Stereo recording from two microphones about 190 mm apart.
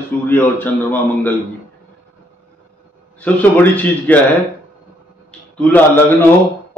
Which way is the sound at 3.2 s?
10° left (ahead or behind).